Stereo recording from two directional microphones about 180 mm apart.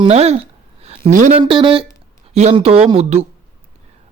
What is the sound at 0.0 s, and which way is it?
Speech, 35° right (ahead or behind).